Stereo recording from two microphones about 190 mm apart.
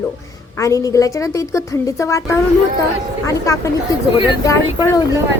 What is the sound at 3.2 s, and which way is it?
A woman's voice, 15° left (ahead or behind).